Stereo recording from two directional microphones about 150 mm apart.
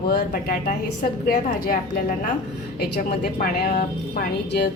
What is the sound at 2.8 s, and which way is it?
Speech, 90° left.